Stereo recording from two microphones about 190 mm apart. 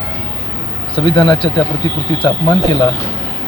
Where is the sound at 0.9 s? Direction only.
25° left (ahead or behind).